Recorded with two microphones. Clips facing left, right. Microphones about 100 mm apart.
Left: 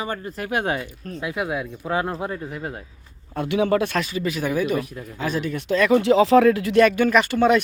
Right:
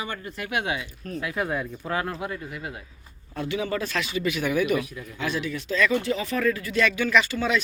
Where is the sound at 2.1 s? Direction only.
35° left (ahead or behind).